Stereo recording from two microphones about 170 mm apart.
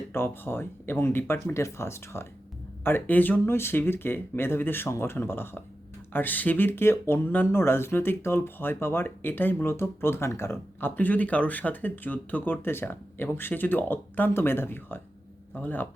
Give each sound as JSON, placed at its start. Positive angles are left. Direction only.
{"t": 0.1, "sound": "speech", "side_deg": 15}